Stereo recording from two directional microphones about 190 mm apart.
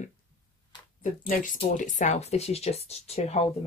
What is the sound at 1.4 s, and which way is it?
Speech, 40° left (ahead or behind).